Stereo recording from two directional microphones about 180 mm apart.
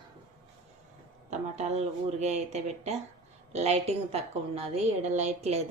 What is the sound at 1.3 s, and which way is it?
A woman's voice, 40° right (ahead or behind).